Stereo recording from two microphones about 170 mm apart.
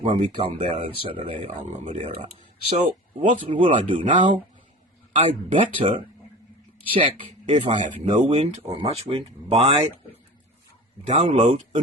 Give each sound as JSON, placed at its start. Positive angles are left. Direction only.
{"t": 0.0, "sound": "speech", "side_deg": -30}
{"t": 4.0, "sound": "speech", "side_deg": -50}
{"t": 5.1, "sound": "speech", "side_deg": -30}
{"t": 11.1, "sound": "speech", "side_deg": -40}